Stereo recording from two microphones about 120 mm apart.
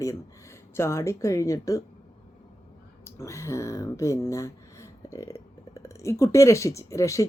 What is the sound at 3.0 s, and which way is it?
Speech, 25° left (ahead or behind).